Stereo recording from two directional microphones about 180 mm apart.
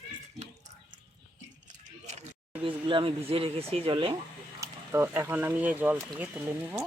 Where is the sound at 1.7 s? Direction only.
40° right (ahead or behind).